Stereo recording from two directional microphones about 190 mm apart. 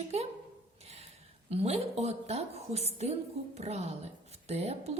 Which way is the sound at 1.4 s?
35° right (ahead or behind).